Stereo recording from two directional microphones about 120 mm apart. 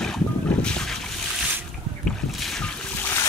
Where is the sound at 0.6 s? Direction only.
5° left (ahead or behind).